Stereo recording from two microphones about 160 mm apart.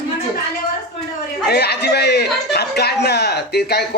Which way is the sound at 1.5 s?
90° left.